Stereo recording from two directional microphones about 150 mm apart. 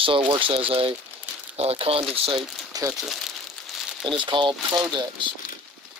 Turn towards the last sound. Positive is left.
turn(degrees=-30)  # may be behind; listen again after turning